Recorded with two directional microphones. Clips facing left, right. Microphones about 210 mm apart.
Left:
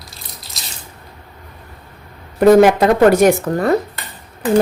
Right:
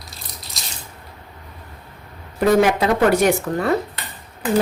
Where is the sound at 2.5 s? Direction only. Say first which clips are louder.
Left 6 dB; 45° left (ahead or behind).